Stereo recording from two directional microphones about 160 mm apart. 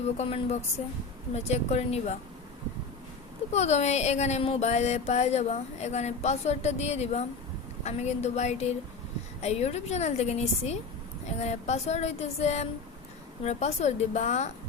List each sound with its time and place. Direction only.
0.2 s speech: 40° left (ahead or behind)
1.3 s music: 40° left (ahead or behind)
3.5 s music: 45° left (ahead or behind)